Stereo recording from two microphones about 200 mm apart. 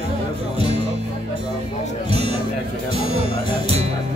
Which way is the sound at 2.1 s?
30° right (ahead or behind).